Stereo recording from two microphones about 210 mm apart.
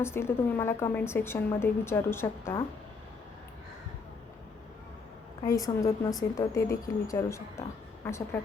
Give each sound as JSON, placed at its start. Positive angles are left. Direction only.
{"t": 0.0, "sound": "a woman's voice", "side_deg": 10}
{"t": 5.4, "sound": "a woman's voice", "side_deg": 15}